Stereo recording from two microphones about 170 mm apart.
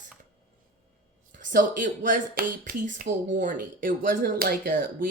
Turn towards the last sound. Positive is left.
turn(degrees=-55)  # may be behind; listen again after turning